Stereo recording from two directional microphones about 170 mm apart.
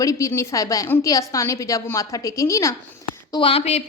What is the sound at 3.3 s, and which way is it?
Speech, 30° left (ahead or behind).